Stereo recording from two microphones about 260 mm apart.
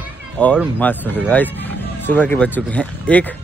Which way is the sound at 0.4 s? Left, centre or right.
Centre.